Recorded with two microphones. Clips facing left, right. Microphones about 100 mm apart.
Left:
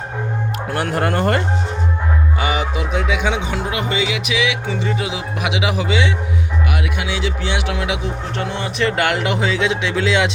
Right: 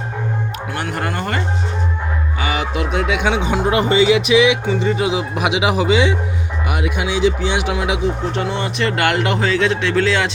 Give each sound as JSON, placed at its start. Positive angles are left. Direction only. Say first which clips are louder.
{"t": 0.7, "sound": "speech", "louder": "left 5 dB", "side_deg": 45}
{"t": 3.7, "sound": "speech", "louder": "right 10 dB", "side_deg": -30}
{"t": 8.4, "sound": "speech", "louder": "right 1 dB", "side_deg": 0}